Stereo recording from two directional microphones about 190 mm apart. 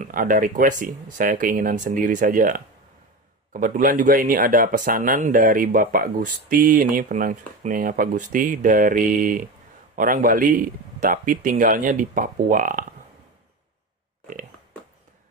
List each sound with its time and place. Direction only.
0.0 s speech: 45° right (ahead or behind)